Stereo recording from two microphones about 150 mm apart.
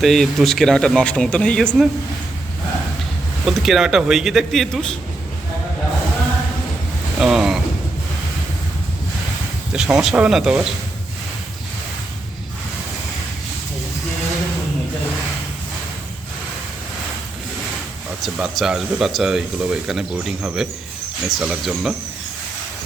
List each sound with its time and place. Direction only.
0.0 s speech: centre (ahead or behind)
3.4 s speech: centre (ahead or behind)
7.2 s boat: 5° right (ahead or behind)
9.7 s speech: 5° right (ahead or behind)
18.2 s speech: centre (ahead or behind)